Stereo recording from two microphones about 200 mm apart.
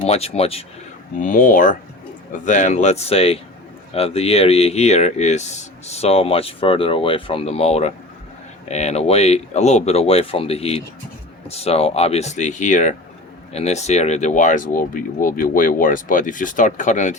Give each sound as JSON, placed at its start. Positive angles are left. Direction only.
{"t": 0.0, "sound": "speech", "side_deg": 30}
{"t": 1.2, "sound": "speech", "side_deg": 40}